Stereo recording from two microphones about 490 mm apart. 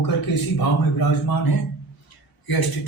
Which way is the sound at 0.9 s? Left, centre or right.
Left.